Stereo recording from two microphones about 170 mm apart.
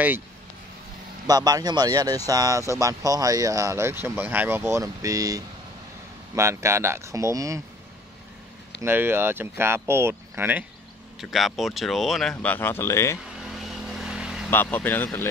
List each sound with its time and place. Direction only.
1.2 s speech: 20° right (ahead or behind)
8.8 s speech: 15° right (ahead or behind)
11.1 s speech: centre (ahead or behind); by 13.2 s 15° left (ahead or behind)
13.4 s vehicle: centre (ahead or behind)
14.5 s speech: 10° left (ahead or behind)